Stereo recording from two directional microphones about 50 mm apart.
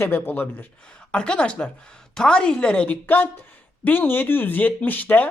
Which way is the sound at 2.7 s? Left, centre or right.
Left.